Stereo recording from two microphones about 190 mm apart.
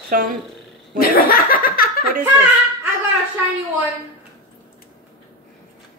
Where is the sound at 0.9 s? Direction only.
50° left (ahead or behind).